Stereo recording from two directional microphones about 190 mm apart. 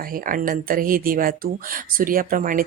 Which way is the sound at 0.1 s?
45° right (ahead or behind).